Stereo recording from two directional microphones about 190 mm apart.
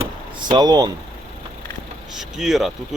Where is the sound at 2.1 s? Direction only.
Centre (ahead or behind).